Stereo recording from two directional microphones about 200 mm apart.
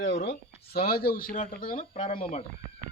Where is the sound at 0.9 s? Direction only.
50° left (ahead or behind).